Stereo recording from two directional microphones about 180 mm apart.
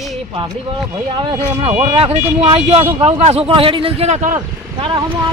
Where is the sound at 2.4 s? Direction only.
35° right (ahead or behind).